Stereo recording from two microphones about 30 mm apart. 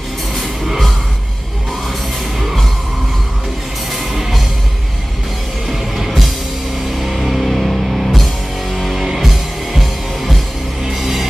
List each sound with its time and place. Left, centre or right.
0.7 s music: centre
5.7 s music: centre
9.2 s music: centre